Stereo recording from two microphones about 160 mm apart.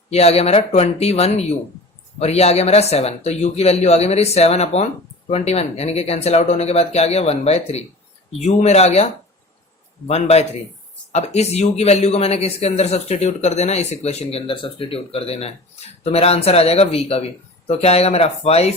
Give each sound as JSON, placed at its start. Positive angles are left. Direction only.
{"t": 0.1, "sound": "speech", "side_deg": 40}
{"t": 10.1, "sound": "speech", "side_deg": 40}